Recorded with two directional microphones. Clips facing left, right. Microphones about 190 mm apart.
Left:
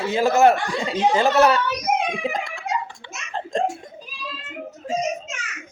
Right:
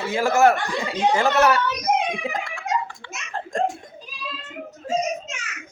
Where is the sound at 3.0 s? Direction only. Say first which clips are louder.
Left 1 dB; 20° left (ahead or behind).